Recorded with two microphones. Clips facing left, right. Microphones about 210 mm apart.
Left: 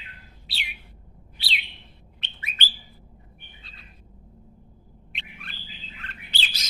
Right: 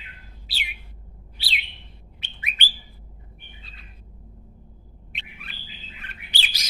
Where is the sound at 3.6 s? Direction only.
Centre (ahead or behind).